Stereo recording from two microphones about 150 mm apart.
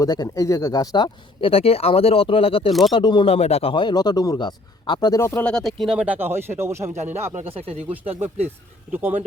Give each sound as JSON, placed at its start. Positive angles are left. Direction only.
{"t": 0.0, "sound": "speech", "side_deg": 25}
{"t": 6.9, "sound": "speech", "side_deg": -50}
{"t": 8.9, "sound": "speech", "side_deg": -10}